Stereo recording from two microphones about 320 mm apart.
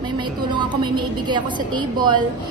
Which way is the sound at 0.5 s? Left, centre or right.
Centre.